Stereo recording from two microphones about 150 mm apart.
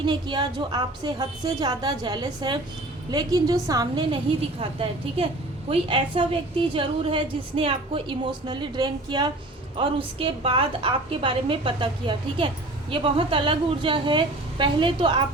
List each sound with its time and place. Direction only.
0.0 s a woman's voice: 30° right (ahead or behind)
4.4 s a woman's voice: 35° right (ahead or behind)